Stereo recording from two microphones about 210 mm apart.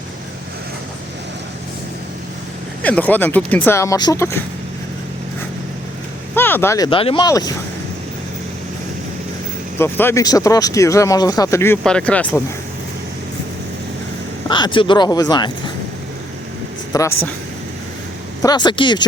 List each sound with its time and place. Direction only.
2.8 s speech: 5° left (ahead or behind)
6.3 s speech: 10° left (ahead or behind)
9.7 s speech: 10° left (ahead or behind)
14.4 s speech: 20° left (ahead or behind)
16.9 s speech: 15° left (ahead or behind)
18.4 s speech: 20° left (ahead or behind)